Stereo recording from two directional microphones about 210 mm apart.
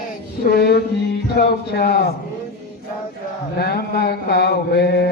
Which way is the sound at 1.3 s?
50° left (ahead or behind).